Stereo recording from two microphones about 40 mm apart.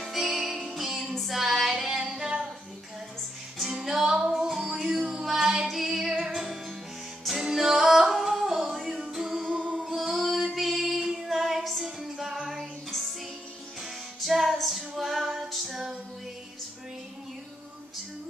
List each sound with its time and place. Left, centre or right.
0.0 s music: centre
1.2 s female singing: centre
3.5 s music: centre
4.0 s music: centre
4.5 s music: centre
7.8 s yodeling: centre
8.3 s music: centre
9.9 s female singing: centre
14.2 s music: centre
14.8 s female singing: centre